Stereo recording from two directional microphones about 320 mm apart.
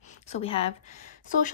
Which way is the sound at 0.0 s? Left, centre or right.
Left.